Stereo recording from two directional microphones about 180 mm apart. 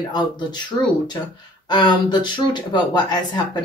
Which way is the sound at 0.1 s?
25° left (ahead or behind).